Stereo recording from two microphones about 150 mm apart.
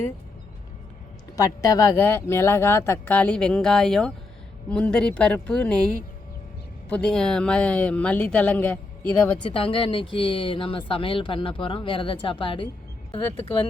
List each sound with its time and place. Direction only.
1.4 s speech: 20° left (ahead or behind)
9.4 s speech: 35° left (ahead or behind)